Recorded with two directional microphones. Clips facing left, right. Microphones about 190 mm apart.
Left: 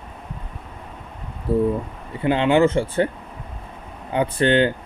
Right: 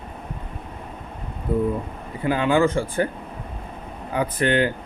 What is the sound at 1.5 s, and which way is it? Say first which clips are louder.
A man's voice: left 3 dB; 30° left (ahead or behind).